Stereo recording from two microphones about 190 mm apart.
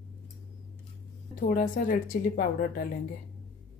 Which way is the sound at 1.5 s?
45° left (ahead or behind).